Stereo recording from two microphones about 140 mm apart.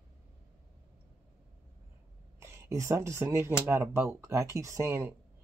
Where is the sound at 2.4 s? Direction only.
20° right (ahead or behind).